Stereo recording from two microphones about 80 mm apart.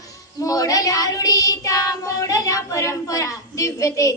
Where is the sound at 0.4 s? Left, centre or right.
Left.